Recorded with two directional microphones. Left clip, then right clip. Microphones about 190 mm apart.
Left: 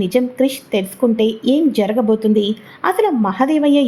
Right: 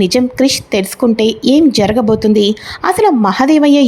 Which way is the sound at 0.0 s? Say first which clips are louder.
Right 4 dB; 25° right (ahead or behind).